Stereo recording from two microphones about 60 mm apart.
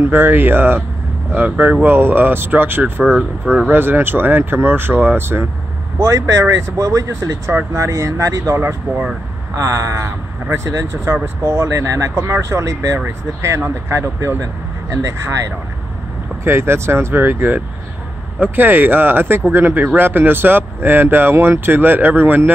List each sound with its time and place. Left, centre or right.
0.0 s speech: right
6.0 s speech: right
8.9 s speech: right
9.6 s speech: right
14.9 s speech: right
16.4 s speech: right
17.2 s speech: right